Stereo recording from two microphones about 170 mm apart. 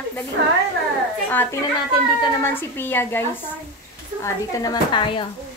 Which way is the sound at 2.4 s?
15° left (ahead or behind).